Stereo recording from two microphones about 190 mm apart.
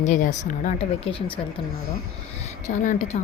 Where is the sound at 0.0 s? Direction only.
40° left (ahead or behind).